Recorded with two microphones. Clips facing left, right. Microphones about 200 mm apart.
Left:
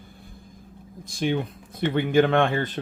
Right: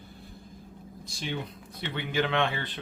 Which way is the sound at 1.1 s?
50° left (ahead or behind).